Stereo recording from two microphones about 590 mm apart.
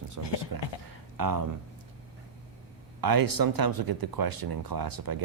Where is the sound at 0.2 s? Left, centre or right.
Right.